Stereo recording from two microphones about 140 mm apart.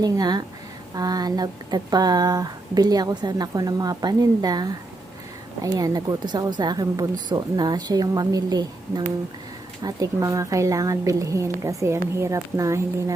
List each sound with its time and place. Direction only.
0.0 s speech: 30° right (ahead or behind)